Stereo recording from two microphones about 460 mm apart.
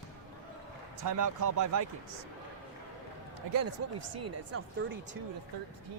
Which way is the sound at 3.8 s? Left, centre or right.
Right.